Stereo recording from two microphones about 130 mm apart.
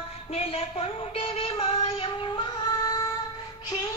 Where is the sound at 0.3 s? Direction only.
50° left (ahead or behind); by 3.1 s 30° left (ahead or behind).